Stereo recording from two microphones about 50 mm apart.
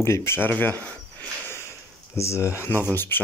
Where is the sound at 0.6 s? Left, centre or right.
Left.